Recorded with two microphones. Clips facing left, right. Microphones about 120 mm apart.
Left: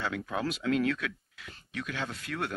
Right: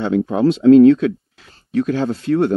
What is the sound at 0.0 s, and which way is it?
Speech, 30° right (ahead or behind).